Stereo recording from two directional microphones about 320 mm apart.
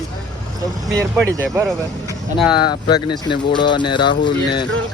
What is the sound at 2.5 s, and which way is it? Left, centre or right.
Speech, centre.